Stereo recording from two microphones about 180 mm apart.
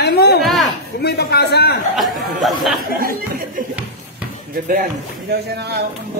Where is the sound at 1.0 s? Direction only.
65° left (ahead or behind).